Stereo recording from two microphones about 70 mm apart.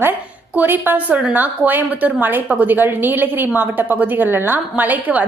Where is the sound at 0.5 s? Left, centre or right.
Right.